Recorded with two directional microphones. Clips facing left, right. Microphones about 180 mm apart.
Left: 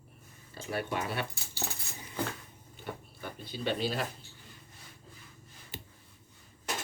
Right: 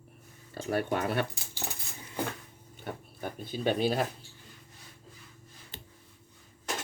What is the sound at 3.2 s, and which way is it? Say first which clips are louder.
Speech: right 5 dB; 50° right (ahead or behind).